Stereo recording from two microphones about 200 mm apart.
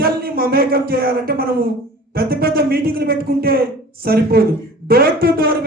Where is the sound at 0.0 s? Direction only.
50° right (ahead or behind).